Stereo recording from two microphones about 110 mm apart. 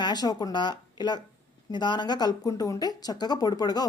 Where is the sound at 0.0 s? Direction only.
40° left (ahead or behind).